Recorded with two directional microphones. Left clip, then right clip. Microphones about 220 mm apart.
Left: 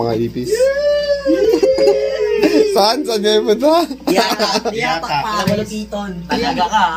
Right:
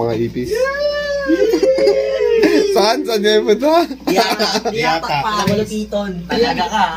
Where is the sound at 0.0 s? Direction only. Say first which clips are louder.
Even; centre (ahead or behind).